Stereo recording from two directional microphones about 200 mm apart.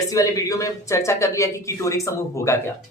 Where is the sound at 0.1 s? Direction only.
15° left (ahead or behind).